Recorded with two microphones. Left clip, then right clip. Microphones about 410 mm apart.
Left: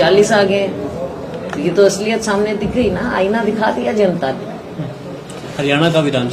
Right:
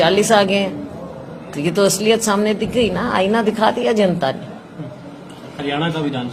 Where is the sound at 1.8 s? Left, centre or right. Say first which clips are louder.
Left 2 dB; right.